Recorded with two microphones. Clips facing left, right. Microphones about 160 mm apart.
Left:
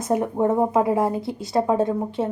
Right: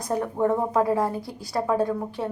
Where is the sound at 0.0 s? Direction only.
20° left (ahead or behind).